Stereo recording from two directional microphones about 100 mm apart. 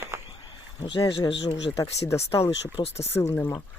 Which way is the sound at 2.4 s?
90° left.